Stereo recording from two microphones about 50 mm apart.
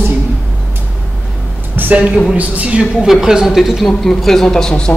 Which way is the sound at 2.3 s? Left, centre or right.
Right.